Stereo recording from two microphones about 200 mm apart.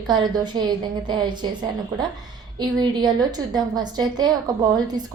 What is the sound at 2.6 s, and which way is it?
A woman's voice, 20° right (ahead or behind).